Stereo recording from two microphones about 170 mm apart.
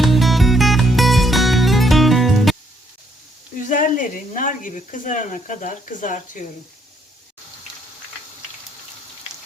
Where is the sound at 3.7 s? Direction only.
50° left (ahead or behind).